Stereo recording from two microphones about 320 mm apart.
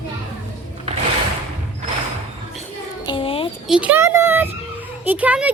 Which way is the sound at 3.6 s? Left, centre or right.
Centre.